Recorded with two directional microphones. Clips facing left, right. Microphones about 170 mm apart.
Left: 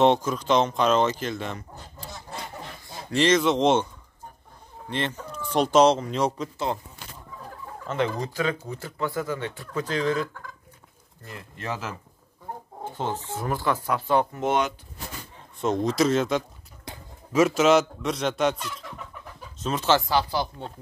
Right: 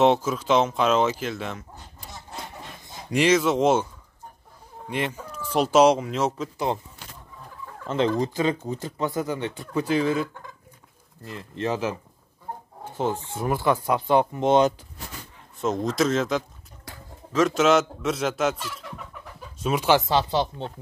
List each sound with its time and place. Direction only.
0.0 s speech: 5° right (ahead or behind)
3.1 s speech: 10° right (ahead or behind)
4.8 s speech: 10° right (ahead or behind)
7.9 s speech: 25° right (ahead or behind); by 10.2 s 5° right (ahead or behind)
11.2 s speech: 25° right (ahead or behind)
12.9 s speech: 10° right (ahead or behind)
15.6 s speech: centre (ahead or behind)
16.8 s a sound: 20° left (ahead or behind)
17.4 s speech: 5° left (ahead or behind); by 20.7 s 25° right (ahead or behind)